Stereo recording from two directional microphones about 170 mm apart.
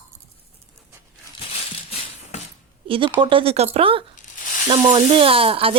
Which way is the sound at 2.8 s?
30° right (ahead or behind).